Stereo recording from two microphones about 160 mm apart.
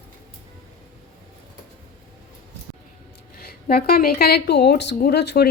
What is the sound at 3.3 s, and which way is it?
Speech, 70° left (ahead or behind).